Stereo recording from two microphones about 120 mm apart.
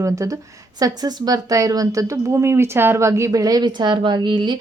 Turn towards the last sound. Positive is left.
turn(degrees=-40)  # may be behind; listen again after turning